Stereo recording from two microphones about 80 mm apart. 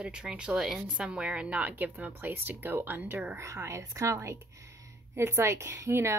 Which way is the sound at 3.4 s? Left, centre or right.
Right.